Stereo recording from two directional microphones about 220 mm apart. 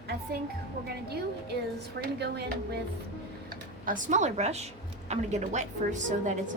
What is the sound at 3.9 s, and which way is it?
A woman's voice, 35° right (ahead or behind).